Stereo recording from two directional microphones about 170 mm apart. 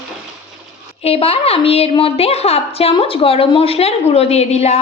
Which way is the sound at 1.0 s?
35° left (ahead or behind).